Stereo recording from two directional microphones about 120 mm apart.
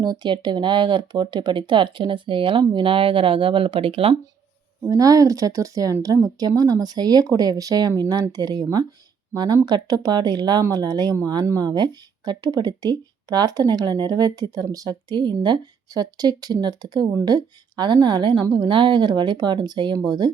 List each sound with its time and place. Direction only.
0.0 s speech: 35° right (ahead or behind)
4.9 s speech: 30° right (ahead or behind)